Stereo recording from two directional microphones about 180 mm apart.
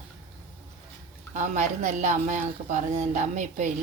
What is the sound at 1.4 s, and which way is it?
Speech, 40° right (ahead or behind).